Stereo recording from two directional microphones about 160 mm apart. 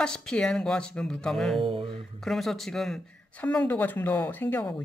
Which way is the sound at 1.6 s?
35° right (ahead or behind).